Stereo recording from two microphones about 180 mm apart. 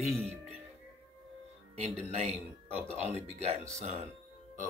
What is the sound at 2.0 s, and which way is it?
Speech, 35° right (ahead or behind).